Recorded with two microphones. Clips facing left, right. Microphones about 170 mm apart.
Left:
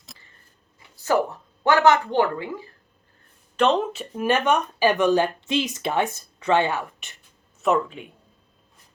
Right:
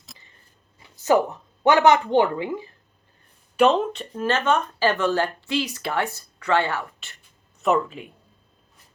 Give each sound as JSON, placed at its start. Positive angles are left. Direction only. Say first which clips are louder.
{"t": 0.8, "sound": "a woman's voice", "louder": "right 3 dB", "side_deg": -20}
{"t": 3.6, "sound": "speech", "louder": "right 2 dB", "side_deg": -5}
{"t": 3.9, "sound": "a woman's voice", "louder": "left 2 dB", "side_deg": 10}
{"t": 7.6, "sound": "speech", "louder": "even", "side_deg": 0}